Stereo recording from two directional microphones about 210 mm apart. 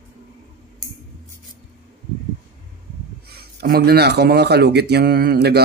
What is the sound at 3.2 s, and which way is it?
Speech, 50° right (ahead or behind).